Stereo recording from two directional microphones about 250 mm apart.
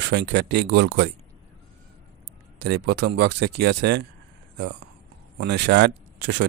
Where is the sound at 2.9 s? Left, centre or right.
Right.